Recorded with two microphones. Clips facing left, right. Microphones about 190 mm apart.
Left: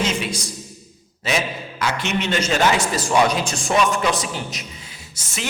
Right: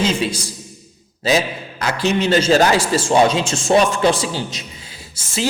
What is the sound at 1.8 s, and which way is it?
A man's voice, 35° right (ahead or behind).